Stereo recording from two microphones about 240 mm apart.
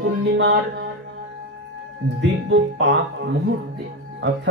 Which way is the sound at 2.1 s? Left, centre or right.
Right.